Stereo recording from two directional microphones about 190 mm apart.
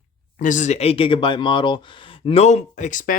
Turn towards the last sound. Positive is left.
turn(degrees=45)  # may be behind; listen again after turning